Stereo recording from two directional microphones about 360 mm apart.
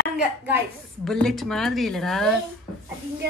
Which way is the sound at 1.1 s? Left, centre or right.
Centre.